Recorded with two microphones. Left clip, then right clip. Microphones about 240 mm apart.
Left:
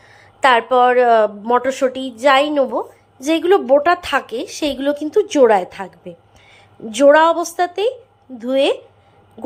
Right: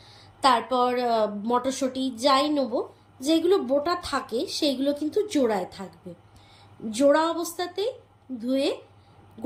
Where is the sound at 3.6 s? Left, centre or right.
Centre.